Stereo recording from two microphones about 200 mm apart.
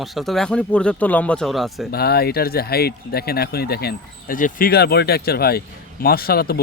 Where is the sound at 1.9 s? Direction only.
50° left (ahead or behind).